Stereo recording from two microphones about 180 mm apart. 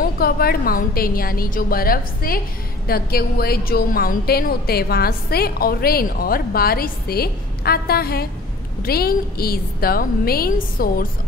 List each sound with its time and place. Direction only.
0.0 s a woman's voice: 55° left (ahead or behind)